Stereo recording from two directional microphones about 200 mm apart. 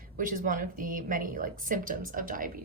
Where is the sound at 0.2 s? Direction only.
45° right (ahead or behind).